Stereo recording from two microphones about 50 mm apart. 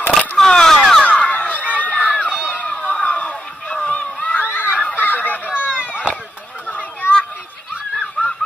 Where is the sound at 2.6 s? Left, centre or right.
Left.